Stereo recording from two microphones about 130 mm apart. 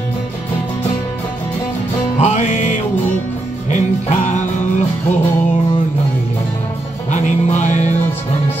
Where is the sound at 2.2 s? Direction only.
65° left (ahead or behind).